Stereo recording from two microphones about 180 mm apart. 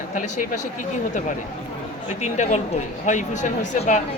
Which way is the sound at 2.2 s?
40° left (ahead or behind).